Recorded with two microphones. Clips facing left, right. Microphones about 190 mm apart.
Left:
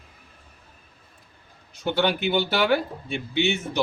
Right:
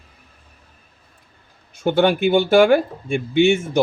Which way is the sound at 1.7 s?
50° right (ahead or behind).